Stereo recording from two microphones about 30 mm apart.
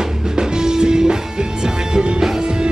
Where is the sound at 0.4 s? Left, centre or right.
Right.